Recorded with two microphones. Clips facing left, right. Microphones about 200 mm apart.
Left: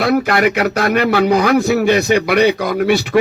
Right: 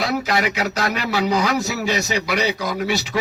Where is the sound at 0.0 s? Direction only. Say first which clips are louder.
Left 7 dB; 55° left (ahead or behind).